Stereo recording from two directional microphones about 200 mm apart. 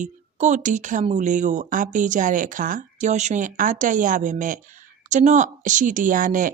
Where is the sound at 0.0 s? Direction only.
35° right (ahead or behind).